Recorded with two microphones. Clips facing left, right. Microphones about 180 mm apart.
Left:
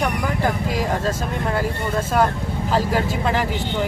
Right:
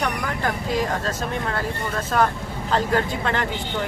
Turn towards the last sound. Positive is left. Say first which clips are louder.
# left 2 dB
turn(degrees=5)  # may be behind; listen again after turning